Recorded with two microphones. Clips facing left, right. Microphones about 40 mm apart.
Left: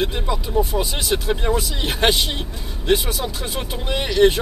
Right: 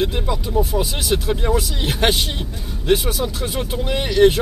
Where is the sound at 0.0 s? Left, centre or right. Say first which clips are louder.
Right 1 dB; centre.